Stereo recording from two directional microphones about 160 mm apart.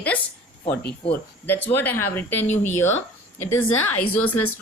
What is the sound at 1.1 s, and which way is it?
Speech, 15° left (ahead or behind).